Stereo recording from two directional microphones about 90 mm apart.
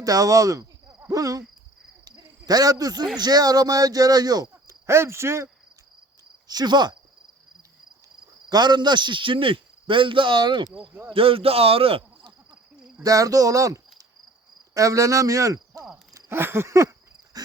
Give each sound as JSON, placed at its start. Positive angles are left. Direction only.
{"t": 0.0, "sound": "speech", "side_deg": -40}
{"t": 0.9, "sound": "cricket", "side_deg": -35}
{"t": 2.0, "sound": "a sound", "side_deg": -45}
{"t": 3.2, "sound": "speech", "side_deg": -50}
{"t": 4.9, "sound": "a sound", "side_deg": -30}
{"t": 6.5, "sound": "speech", "side_deg": -50}
{"t": 8.4, "sound": "a man's voice", "side_deg": -50}
{"t": 11.1, "sound": "speech", "side_deg": -90}
{"t": 13.0, "sound": "speech", "side_deg": -40}
{"t": 16.3, "sound": "a sound", "side_deg": -25}